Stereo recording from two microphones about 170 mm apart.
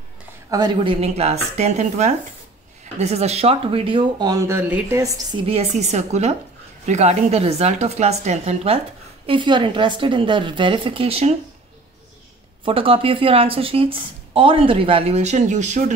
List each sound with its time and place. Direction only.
0.5 s a woman's voice: 25° right (ahead or behind)
5.5 s a woman's voice: 40° right (ahead or behind)
12.6 s a woman's voice: 30° right (ahead or behind)